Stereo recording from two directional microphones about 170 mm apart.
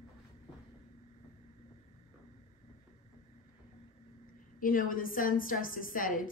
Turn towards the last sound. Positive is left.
turn(degrees=55)  # may be behind; listen again after turning